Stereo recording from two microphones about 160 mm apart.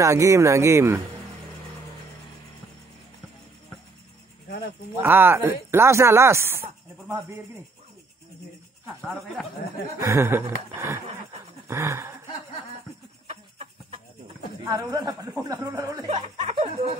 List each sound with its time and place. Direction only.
0.0 s speech: 20° right (ahead or behind)
5.0 s speech: 15° right (ahead or behind)
8.8 s speech: 5° right (ahead or behind)
9.9 s speech: 15° right (ahead or behind)
11.6 s a sound: 15° right (ahead or behind)
13.3 s chicken: 35° right (ahead or behind)
14.7 s speech: 25° right (ahead or behind)
16.5 s speech: 35° right (ahead or behind)